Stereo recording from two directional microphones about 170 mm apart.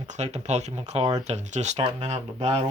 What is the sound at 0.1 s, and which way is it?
Speech, 40° right (ahead or behind).